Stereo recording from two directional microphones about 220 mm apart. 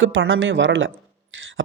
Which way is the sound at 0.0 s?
65° right (ahead or behind).